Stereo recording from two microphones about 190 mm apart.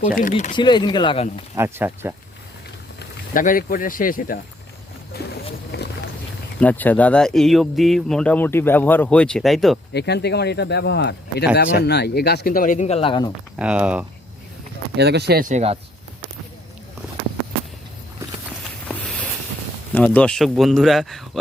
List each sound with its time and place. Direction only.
0.2 s speech: 40° left (ahead or behind)
0.5 s speech: 25° left (ahead or behind)
1.5 s speech: 10° right (ahead or behind)
3.0 s speech: 45° left (ahead or behind)
5.1 s wild animals: 60° left (ahead or behind)
6.6 s speech: 10° left (ahead or behind)
9.9 s speech: 60° left (ahead or behind); by 13.3 s 25° left (ahead or behind)
13.6 s speech: 5° right (ahead or behind)
14.9 s speech: 60° right (ahead or behind); by 15.8 s 35° right (ahead or behind)
18.9 s a sound: 5° left (ahead or behind)
19.9 s speech: 5° left (ahead or behind)